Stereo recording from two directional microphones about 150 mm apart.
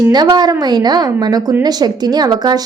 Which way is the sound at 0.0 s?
25° right (ahead or behind).